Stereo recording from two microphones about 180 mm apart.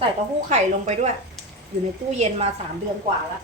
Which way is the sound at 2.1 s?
35° right (ahead or behind).